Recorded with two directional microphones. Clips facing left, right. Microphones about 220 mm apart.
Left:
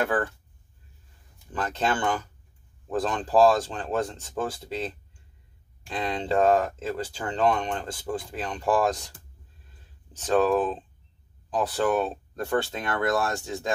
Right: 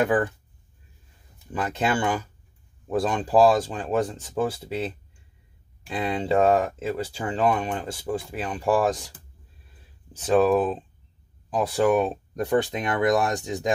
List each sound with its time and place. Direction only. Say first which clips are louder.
0.0 s speech: right 4 dB; 15° right (ahead or behind)
1.5 s speech: right 2 dB; 10° right (ahead or behind)